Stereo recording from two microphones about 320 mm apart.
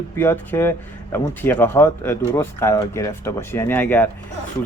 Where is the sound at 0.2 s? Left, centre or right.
Centre.